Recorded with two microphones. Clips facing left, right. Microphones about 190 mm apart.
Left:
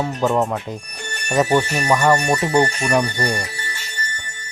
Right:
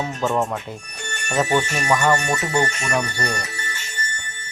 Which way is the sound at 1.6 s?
35° left (ahead or behind).